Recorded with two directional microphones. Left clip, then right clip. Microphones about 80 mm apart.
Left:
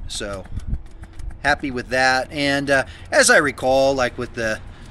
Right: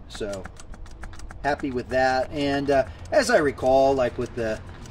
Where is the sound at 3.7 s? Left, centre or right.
Left.